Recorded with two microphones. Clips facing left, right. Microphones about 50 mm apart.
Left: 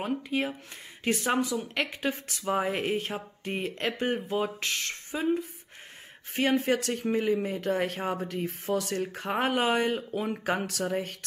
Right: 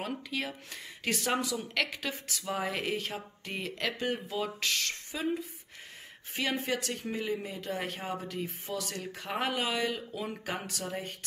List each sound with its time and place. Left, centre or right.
0.3 s speech: left
6.3 s speech: left